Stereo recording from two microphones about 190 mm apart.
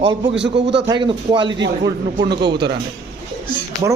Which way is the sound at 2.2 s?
60° right (ahead or behind).